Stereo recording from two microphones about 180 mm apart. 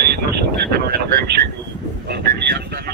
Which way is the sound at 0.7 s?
60° right (ahead or behind).